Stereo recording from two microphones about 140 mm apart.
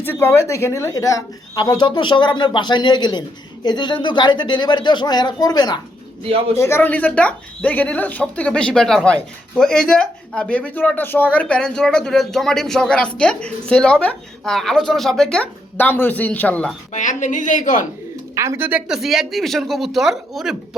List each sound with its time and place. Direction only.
0.0 s speech: 15° left (ahead or behind)
6.2 s a man's voice: 45° right (ahead or behind)
6.6 s a woman's voice: 15° left (ahead or behind)
16.9 s a woman's voice: 60° left (ahead or behind)
18.3 s speech: 20° right (ahead or behind)
18.9 s speech: centre (ahead or behind)